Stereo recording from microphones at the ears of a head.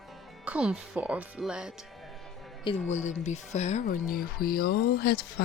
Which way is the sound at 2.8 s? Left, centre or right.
Left.